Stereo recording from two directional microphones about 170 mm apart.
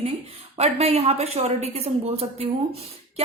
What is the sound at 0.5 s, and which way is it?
A woman's voice, 40° right (ahead or behind).